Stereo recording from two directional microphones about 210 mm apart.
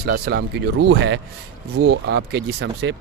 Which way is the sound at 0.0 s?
50° right (ahead or behind).